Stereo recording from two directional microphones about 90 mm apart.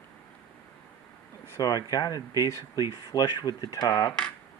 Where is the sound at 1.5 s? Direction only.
40° left (ahead or behind).